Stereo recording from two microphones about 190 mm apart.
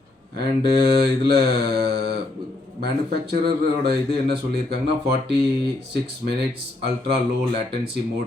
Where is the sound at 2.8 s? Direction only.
55° right (ahead or behind).